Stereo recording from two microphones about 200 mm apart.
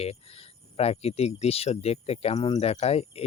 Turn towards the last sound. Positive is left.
turn(degrees=30)  # may be behind; listen again after turning